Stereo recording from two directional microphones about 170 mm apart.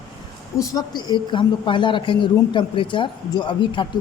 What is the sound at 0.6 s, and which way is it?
Speech, 20° left (ahead or behind).